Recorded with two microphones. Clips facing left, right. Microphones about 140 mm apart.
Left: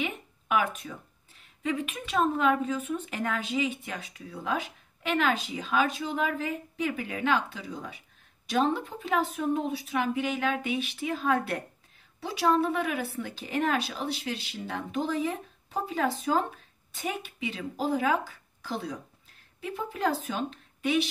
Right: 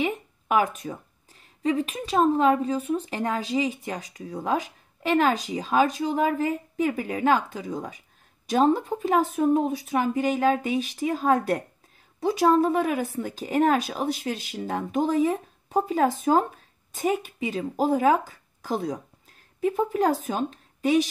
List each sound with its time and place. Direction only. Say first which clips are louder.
0.0 s speech: right 6 dB; 40° right (ahead or behind)